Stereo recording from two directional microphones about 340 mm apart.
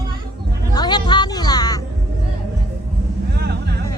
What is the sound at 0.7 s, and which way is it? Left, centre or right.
Music, centre.